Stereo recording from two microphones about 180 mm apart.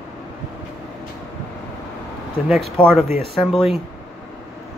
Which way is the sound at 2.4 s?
Centre (ahead or behind).